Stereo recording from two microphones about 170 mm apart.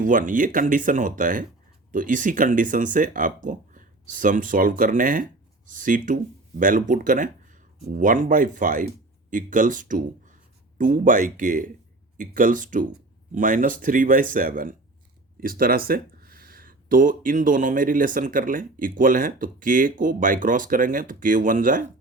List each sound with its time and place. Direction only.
0.0 s speech: 50° right (ahead or behind)